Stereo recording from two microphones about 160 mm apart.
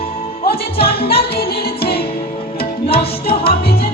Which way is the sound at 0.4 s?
70° left (ahead or behind).